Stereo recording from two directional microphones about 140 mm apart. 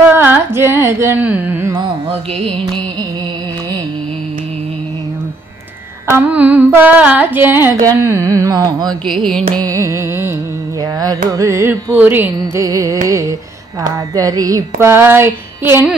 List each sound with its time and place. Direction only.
0.0 s carnatic music: 15° right (ahead or behind)
6.0 s music: 15° right (ahead or behind)
7.8 s carnatic music: 25° right (ahead or behind)
8.8 s carnatic music: centre (ahead or behind)
9.7 s carnatic music: 20° right (ahead or behind)
11.9 s music: 15° right (ahead or behind)
12.4 s carnatic music: 25° right (ahead or behind)
14.1 s music: 25° right (ahead or behind)